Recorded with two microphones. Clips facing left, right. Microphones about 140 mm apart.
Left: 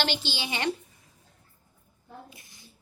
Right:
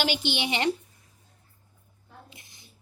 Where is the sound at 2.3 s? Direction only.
20° right (ahead or behind).